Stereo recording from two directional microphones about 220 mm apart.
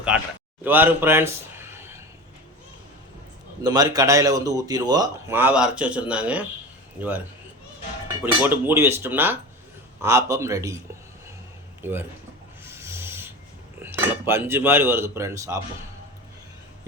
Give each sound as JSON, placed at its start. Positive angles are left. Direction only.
{"t": 0.1, "sound": "a man's voice", "side_deg": -5}
{"t": 3.6, "sound": "speech", "side_deg": -15}
{"t": 8.2, "sound": "speech", "side_deg": -10}
{"t": 11.8, "sound": "speech", "side_deg": -10}
{"t": 12.6, "sound": "filing", "side_deg": -10}
{"t": 13.8, "sound": "speech", "side_deg": -10}